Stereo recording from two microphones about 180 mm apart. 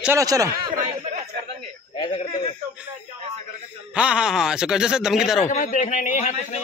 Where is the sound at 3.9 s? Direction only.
5° right (ahead or behind).